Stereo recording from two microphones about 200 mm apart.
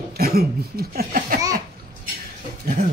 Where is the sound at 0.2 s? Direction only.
50° right (ahead or behind).